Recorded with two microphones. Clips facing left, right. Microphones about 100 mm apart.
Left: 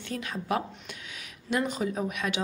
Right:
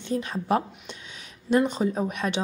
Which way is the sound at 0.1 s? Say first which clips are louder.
Right 6 dB; 30° right (ahead or behind).